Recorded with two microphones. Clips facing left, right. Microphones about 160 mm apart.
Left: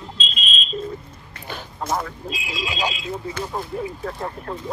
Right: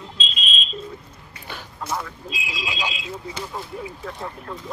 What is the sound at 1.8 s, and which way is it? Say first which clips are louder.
Speech: left 4 dB; 45° left (ahead or behind).